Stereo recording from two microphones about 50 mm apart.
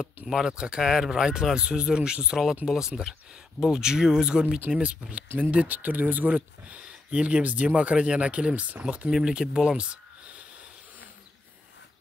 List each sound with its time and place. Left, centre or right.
0.3 s speech: centre
5.4 s speech: right
6.3 s speech: right